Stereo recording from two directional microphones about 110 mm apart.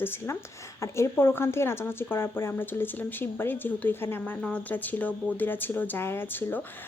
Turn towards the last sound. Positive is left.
turn(degrees=20)  # may be behind; listen again after turning